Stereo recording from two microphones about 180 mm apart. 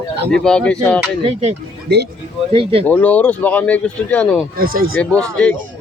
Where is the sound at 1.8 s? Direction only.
65° right (ahead or behind).